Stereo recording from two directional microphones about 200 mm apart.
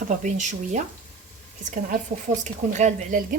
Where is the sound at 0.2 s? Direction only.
35° right (ahead or behind).